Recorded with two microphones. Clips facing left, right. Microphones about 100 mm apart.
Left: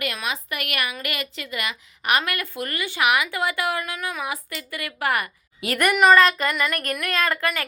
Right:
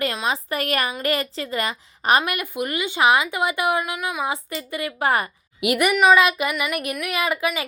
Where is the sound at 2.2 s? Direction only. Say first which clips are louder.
Right 3 dB; 20° right (ahead or behind).